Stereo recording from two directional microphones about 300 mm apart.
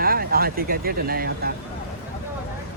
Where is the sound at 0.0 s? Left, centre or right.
Right.